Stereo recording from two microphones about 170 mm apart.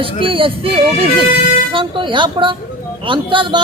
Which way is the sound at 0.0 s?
30° right (ahead or behind).